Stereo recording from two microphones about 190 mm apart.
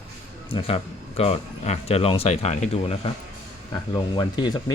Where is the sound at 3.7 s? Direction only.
20° left (ahead or behind).